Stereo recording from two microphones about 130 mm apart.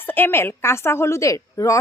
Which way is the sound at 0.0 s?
15° left (ahead or behind).